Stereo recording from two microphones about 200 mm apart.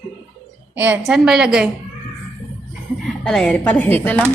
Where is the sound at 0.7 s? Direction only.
10° right (ahead or behind).